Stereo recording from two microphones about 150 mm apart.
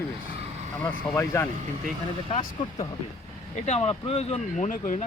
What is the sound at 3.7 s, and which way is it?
Speech, 45° left (ahead or behind).